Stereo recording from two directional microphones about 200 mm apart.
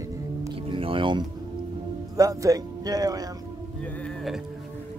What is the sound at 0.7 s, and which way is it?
Music, 25° right (ahead or behind).